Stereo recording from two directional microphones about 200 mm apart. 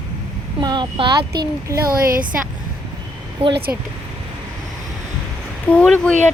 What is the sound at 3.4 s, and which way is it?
Speech, 25° right (ahead or behind).